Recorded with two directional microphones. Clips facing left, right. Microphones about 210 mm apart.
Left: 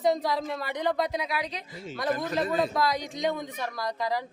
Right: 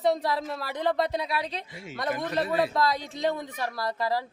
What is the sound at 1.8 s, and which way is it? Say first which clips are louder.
Speech: left 2 dB; 10° right (ahead or behind).